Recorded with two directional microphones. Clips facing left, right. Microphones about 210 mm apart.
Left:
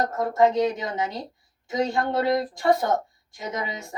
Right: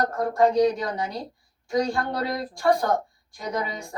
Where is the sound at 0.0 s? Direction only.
20° left (ahead or behind).